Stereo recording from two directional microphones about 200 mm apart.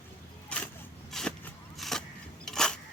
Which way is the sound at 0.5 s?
5° left (ahead or behind).